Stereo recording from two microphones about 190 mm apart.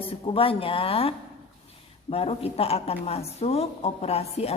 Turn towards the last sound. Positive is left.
turn(degrees=30)  # may be behind; listen again after turning